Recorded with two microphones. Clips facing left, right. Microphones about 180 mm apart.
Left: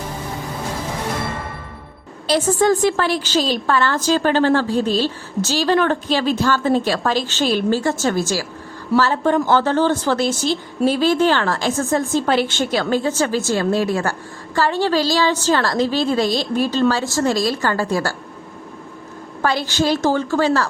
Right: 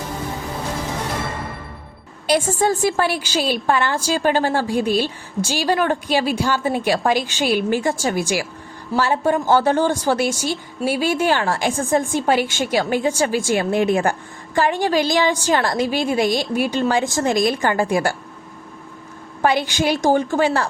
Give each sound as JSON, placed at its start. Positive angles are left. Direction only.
{"t": 2.2, "sound": "a woman's voice", "side_deg": -10}
{"t": 19.4, "sound": "a woman's voice", "side_deg": -15}